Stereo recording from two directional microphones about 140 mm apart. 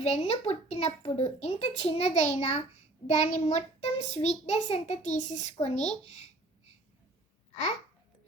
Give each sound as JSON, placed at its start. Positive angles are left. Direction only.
{"t": 0.0, "sound": "a child's voice", "side_deg": 50}